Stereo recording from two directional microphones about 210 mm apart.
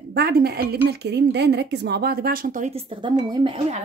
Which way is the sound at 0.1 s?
50° right (ahead or behind).